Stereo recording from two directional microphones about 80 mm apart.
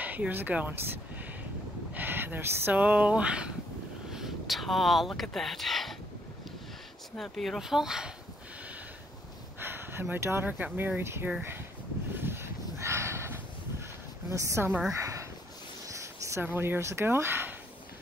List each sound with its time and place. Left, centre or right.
0.0 s speech: right; by 5.9 s centre
7.2 s speech: centre
9.6 s speech: right
12.2 s a sound: right
14.3 s a woman's voice: right
15.9 s a sound: right
16.4 s speech: right